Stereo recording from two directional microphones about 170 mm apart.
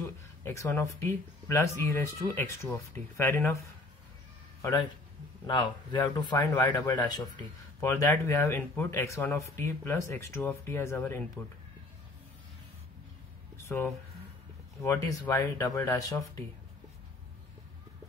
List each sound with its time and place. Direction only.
0.0 s speech: 15° left (ahead or behind)
5.5 s speech: 25° left (ahead or behind)
13.6 s a sound: 15° left (ahead or behind)
14.8 s speech: 20° left (ahead or behind)